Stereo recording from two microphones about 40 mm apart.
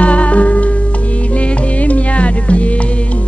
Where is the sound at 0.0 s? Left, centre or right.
Left.